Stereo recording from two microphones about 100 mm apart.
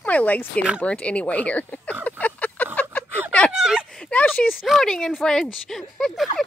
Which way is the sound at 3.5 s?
5° right (ahead or behind).